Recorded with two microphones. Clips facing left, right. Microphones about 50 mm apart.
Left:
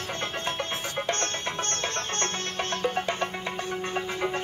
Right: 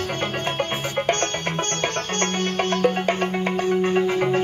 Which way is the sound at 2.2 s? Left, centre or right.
Right.